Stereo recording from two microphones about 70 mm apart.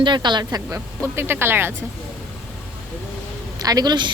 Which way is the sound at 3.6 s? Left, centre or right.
Right.